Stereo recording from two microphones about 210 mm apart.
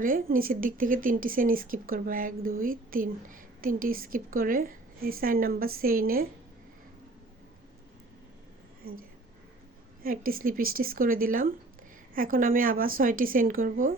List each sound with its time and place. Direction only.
0.0 s a woman's voice: 40° right (ahead or behind)
8.8 s a woman's voice: 45° right (ahead or behind)